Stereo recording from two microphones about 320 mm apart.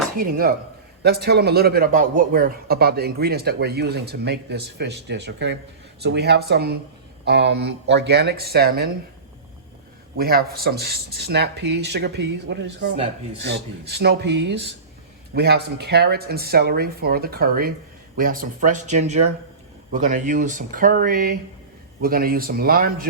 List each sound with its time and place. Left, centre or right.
0.2 s speech: right
10.2 s speech: right